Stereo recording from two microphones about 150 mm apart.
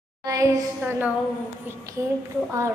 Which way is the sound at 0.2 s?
20° right (ahead or behind).